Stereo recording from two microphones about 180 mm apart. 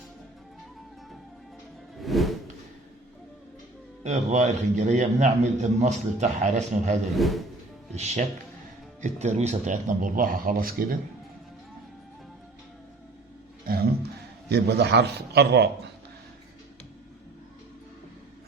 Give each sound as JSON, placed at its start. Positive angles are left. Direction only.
{"t": 2.0, "sound": "music", "side_deg": 0}
{"t": 4.0, "sound": "a man's voice", "side_deg": -40}
{"t": 7.2, "sound": "speech", "side_deg": 0}
{"t": 7.9, "sound": "a man's voice", "side_deg": -35}
{"t": 13.7, "sound": "roaring cats", "side_deg": -55}
{"t": 14.5, "sound": "a man's voice", "side_deg": -65}